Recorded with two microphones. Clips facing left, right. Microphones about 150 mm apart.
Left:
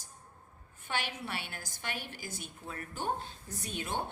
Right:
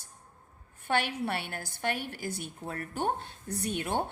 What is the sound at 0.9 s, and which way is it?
A woman's voice, 55° right (ahead or behind).